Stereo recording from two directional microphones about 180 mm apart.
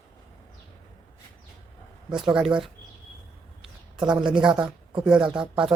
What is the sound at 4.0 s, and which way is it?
A woman's voice, 5° right (ahead or behind).